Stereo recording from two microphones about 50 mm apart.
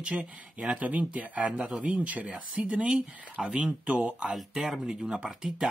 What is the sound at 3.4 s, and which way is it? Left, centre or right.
Speech, centre.